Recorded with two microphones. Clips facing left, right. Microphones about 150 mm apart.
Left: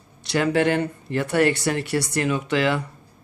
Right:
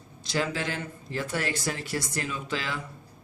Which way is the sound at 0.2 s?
65° left (ahead or behind).